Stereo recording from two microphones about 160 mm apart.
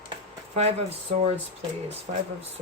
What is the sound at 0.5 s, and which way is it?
Speech, 40° right (ahead or behind).